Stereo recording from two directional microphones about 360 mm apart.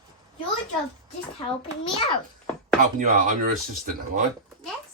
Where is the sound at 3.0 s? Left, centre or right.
Right.